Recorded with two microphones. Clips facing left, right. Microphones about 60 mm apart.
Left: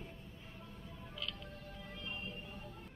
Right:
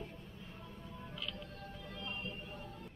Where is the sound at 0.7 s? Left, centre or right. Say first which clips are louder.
Right 2 dB; centre.